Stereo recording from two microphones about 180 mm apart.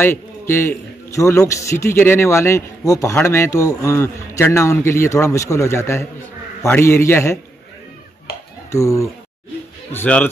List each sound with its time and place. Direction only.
0.0 s a man's voice: 15° left (ahead or behind)
8.7 s a man's voice: 15° left (ahead or behind)